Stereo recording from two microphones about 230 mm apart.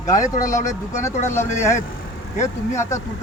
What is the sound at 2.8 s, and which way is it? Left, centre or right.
Speech, centre.